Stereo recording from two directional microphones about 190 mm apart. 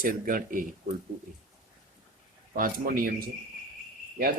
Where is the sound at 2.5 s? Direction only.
45° right (ahead or behind).